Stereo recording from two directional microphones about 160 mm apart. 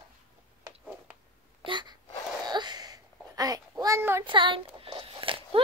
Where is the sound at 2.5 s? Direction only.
25° right (ahead or behind).